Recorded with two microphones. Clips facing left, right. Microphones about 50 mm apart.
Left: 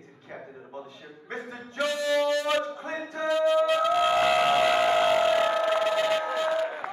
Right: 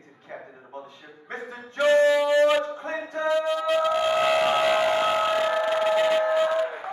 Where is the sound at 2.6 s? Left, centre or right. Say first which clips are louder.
Right 2 dB; right.